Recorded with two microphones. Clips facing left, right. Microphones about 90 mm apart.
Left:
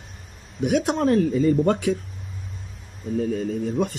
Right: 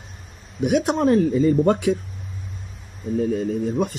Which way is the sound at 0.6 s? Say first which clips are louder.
Right 2 dB; 20° right (ahead or behind).